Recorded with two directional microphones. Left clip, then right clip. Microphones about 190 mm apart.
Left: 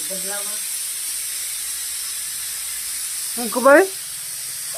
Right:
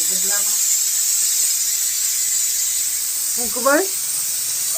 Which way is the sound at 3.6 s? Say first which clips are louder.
Left 5 dB; 45° left (ahead or behind).